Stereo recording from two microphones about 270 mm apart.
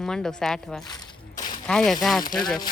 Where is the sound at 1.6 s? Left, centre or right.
Centre.